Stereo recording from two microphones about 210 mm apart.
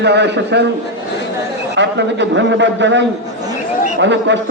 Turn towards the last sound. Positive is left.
turn(degrees=-60)  # may be behind; listen again after turning